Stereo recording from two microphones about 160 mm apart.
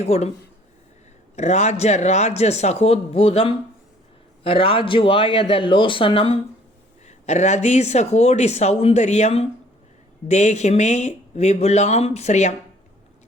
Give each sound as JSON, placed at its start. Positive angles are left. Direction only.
{"t": 0.0, "sound": "speech", "side_deg": 45}
{"t": 1.4, "sound": "speech", "side_deg": 45}
{"t": 4.4, "sound": "speech", "side_deg": 35}
{"t": 7.0, "sound": "speech", "side_deg": 45}